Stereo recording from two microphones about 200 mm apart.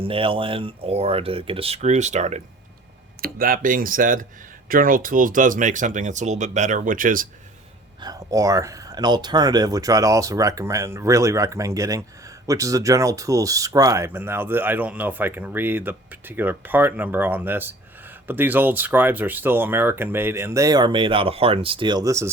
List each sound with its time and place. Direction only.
0.0 s speech: 25° right (ahead or behind)
3.2 s speech: 45° right (ahead or behind)
8.0 s speech: 15° right (ahead or behind)